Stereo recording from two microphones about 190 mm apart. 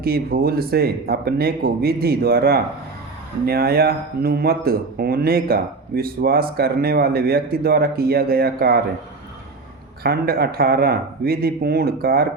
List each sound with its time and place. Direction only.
0.0 s speech: 55° right (ahead or behind)
10.0 s speech: 55° right (ahead or behind)